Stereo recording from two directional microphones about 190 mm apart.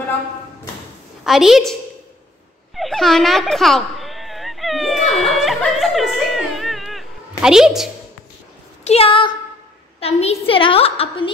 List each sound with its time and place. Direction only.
1.2 s a woman's voice: centre (ahead or behind)
2.7 s a sound: centre (ahead or behind)
8.8 s a woman's voice: 30° left (ahead or behind)